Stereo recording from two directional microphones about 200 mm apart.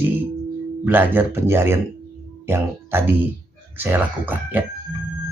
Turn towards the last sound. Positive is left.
turn(degrees=-10)  # may be behind; listen again after turning